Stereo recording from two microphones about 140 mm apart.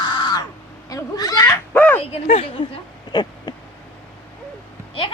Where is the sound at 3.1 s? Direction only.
30° left (ahead or behind).